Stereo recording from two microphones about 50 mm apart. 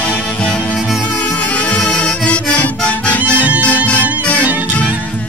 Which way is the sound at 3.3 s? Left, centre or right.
Right.